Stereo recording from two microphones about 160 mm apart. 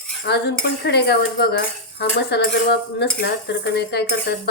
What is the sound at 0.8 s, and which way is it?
Speech, 90° left.